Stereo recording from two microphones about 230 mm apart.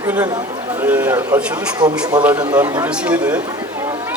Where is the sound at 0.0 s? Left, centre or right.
Centre.